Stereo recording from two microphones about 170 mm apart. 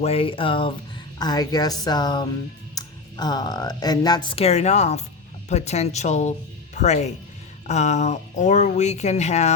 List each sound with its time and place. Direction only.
0.0 s speech: 35° left (ahead or behind)